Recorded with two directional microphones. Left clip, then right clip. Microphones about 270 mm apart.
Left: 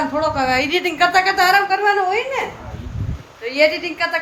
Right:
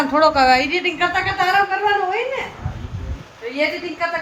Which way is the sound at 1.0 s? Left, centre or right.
Centre.